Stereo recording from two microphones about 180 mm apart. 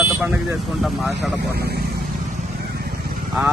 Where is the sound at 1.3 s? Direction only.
60° right (ahead or behind).